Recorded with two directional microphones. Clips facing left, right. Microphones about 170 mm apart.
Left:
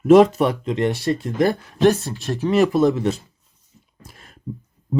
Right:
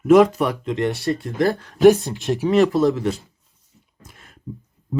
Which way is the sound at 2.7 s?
20° left (ahead or behind).